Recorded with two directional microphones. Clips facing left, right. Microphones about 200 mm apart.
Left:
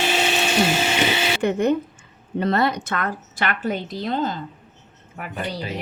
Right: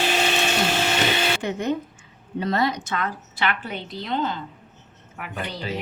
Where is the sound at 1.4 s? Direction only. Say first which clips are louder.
Left 6 dB; 55° left (ahead or behind).